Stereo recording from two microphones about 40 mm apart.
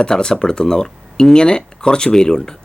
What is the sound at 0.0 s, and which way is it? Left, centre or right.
Speech, centre.